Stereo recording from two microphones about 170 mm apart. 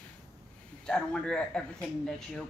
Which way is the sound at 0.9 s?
5° left (ahead or behind).